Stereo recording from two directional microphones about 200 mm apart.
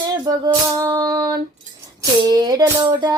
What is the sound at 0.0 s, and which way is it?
Music, 20° right (ahead or behind).